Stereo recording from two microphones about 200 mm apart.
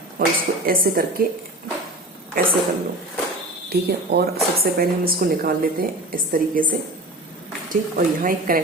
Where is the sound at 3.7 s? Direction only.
55° right (ahead or behind).